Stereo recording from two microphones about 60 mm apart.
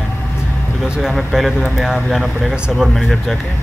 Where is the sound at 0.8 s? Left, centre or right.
Centre.